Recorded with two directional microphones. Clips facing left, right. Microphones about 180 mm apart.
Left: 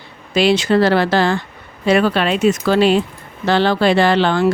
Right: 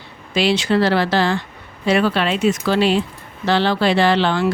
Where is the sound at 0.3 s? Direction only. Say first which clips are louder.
Left 3 dB; 45° left (ahead or behind).